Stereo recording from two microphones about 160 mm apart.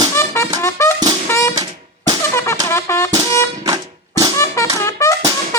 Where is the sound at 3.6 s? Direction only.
25° right (ahead or behind).